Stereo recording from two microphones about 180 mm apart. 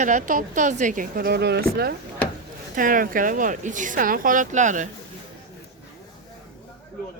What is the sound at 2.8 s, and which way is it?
Speech, 50° right (ahead or behind).